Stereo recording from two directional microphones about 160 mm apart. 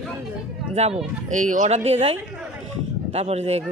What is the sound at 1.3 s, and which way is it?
Speech, 55° right (ahead or behind).